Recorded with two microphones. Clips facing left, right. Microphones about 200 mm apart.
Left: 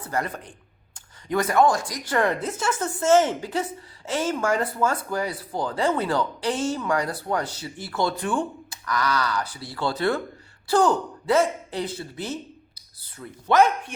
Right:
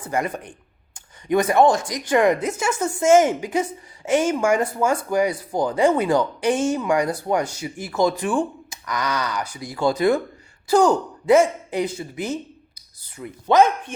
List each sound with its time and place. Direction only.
0.0 s a woman's voice: 15° right (ahead or behind)
8.7 s a woman's voice: 20° right (ahead or behind)